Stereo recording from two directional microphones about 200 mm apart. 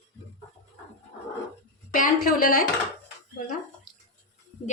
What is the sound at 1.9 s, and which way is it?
Speech, 45° left (ahead or behind).